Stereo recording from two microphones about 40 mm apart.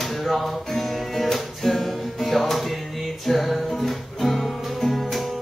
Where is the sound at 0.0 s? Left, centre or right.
Centre.